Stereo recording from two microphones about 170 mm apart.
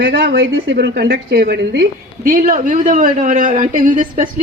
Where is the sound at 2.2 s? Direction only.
55° right (ahead or behind).